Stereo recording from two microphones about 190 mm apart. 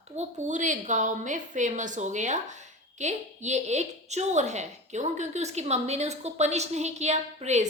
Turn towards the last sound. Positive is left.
turn(degrees=-35)  # may be behind; listen again after turning